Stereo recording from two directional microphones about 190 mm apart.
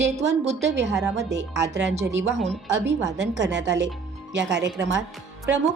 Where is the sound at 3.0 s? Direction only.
65° right (ahead or behind).